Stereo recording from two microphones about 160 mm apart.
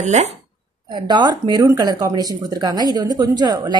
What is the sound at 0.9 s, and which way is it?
A woman's voice, 25° right (ahead or behind).